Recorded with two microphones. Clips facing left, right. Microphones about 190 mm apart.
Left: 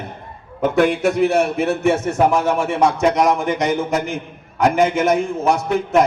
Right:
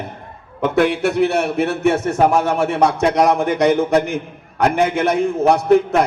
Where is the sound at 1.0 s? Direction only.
65° right (ahead or behind).